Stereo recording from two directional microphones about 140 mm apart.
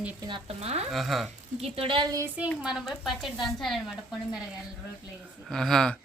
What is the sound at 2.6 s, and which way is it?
A woman's voice, centre (ahead or behind).